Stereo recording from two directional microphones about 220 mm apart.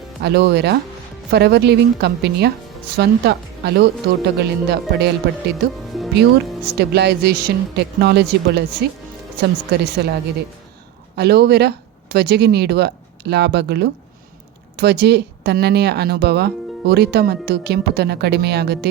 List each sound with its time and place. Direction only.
0.2 s speech: 50° right (ahead or behind)
6.7 s speech: 50° right (ahead or behind)
11.2 s speech: 45° right (ahead or behind)